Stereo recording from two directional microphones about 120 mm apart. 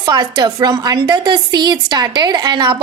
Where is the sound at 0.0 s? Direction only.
35° right (ahead or behind).